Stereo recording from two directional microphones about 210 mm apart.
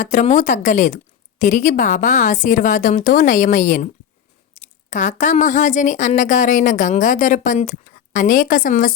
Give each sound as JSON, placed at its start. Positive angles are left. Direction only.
{"t": 0.0, "sound": "speech", "side_deg": 35}